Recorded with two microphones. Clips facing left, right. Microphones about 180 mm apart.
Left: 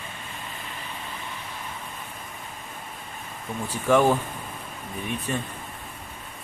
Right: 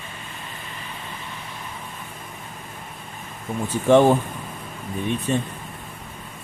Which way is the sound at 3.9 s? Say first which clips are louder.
Right 5 dB; 25° right (ahead or behind).